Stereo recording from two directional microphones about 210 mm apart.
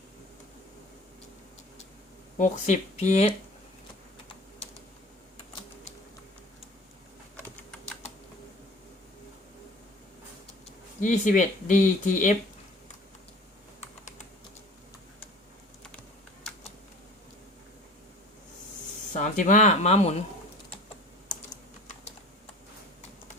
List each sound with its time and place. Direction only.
2.4 s speech: 35° left (ahead or behind)
11.0 s speech: 40° left (ahead or behind)
19.1 s speech: 35° left (ahead or behind)